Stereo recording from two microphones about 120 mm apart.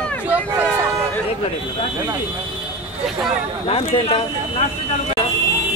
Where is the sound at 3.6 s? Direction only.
55° left (ahead or behind).